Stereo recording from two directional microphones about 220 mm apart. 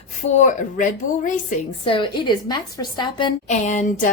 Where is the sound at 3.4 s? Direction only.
35° left (ahead or behind).